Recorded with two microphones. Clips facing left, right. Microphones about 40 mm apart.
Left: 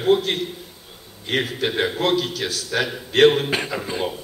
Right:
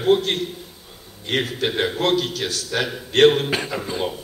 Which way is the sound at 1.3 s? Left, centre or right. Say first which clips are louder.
Even; centre.